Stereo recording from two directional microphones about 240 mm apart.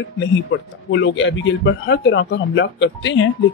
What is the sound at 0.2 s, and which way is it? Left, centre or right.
Speech, left.